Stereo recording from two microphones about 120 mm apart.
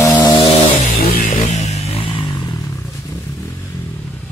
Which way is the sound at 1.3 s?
80° left.